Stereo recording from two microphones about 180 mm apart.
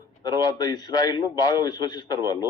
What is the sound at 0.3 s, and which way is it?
A man's voice, 20° left (ahead or behind).